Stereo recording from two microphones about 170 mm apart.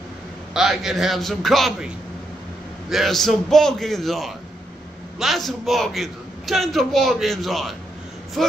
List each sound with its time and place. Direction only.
0.6 s a man's voice: centre (ahead or behind)
2.9 s a man's voice: centre (ahead or behind)